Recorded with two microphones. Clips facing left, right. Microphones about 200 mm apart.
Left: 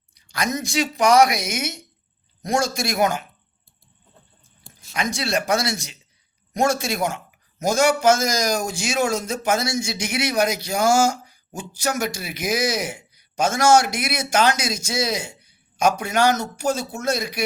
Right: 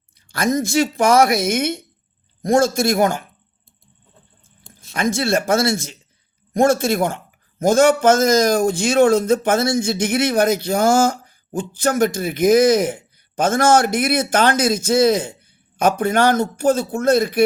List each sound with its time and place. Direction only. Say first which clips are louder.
0.1 s a man's voice: right 6 dB; 55° right (ahead or behind)
4.9 s a man's voice: right 6 dB; 50° right (ahead or behind)